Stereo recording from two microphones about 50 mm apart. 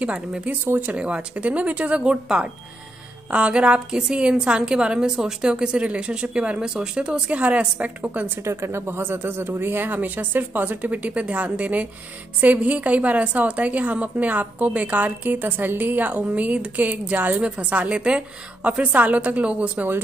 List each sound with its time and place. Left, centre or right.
0.0 s a woman's voice: right
8.5 s speech: right
10.8 s a woman's voice: right